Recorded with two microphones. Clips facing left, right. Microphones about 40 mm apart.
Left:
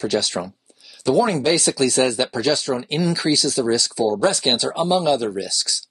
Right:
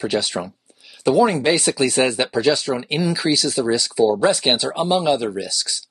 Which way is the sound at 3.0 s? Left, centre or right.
Centre.